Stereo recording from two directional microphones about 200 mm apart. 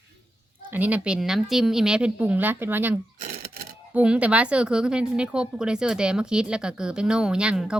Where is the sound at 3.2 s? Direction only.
45° right (ahead or behind).